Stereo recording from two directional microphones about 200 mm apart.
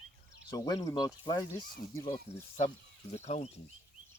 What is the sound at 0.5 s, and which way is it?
Speech, 20° left (ahead or behind).